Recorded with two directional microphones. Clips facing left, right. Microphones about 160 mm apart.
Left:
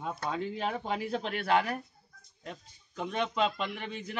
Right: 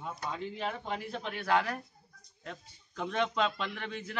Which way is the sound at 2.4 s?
10° left (ahead or behind).